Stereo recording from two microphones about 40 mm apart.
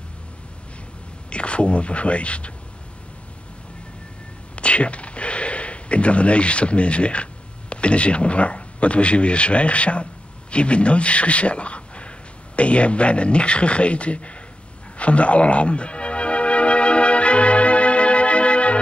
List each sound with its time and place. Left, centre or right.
1.3 s speech: left
4.6 s a sound: left
7.7 s a man's voice: left
15.0 s music: left